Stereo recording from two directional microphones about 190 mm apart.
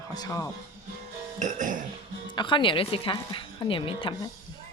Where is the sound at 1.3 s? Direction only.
40° right (ahead or behind).